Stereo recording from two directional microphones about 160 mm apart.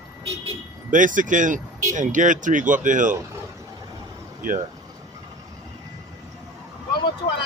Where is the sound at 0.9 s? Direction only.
55° right (ahead or behind).